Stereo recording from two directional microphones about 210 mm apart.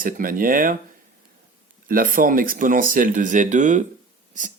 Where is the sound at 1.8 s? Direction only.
40° right (ahead or behind).